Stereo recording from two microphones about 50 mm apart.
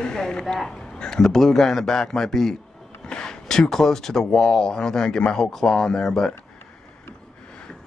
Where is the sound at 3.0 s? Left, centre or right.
Centre.